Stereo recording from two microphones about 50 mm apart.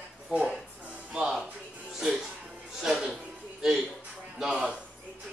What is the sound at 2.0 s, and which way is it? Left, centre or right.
Music, centre.